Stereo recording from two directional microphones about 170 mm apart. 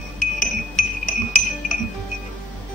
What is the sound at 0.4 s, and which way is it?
Music, 50° left (ahead or behind).